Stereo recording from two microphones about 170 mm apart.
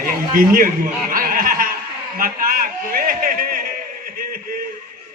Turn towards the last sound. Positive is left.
turn(degrees=-55)  # may be behind; listen again after turning